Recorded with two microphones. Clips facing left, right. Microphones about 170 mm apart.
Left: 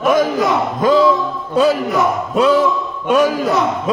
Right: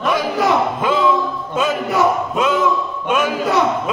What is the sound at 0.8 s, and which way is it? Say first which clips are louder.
Music: left 10 dB; 40° left (ahead or behind).